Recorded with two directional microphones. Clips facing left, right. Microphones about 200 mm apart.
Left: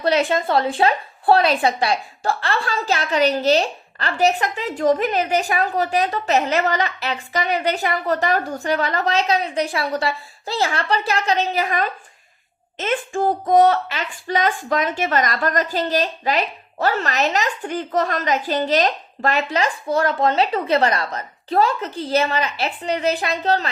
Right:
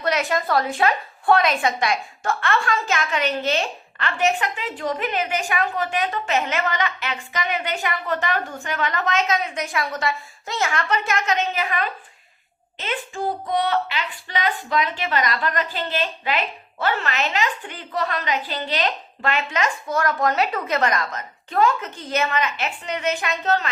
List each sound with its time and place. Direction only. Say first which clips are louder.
0.0 s a woman's voice: left 4 dB; 30° left (ahead or behind)